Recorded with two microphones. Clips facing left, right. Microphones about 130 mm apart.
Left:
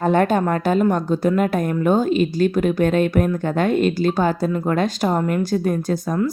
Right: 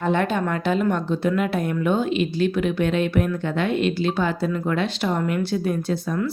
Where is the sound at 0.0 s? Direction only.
45° left (ahead or behind).